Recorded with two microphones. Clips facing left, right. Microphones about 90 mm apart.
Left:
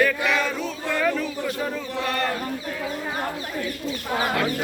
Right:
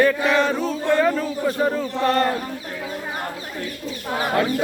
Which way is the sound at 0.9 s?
30° right (ahead or behind).